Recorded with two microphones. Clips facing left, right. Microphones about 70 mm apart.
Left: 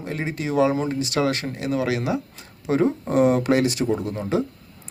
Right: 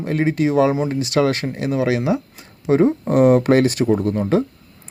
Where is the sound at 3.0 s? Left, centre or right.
Right.